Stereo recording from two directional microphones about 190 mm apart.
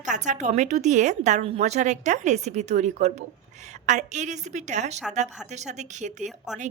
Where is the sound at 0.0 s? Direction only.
40° right (ahead or behind).